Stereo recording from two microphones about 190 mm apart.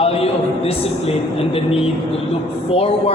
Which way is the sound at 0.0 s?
30° left (ahead or behind).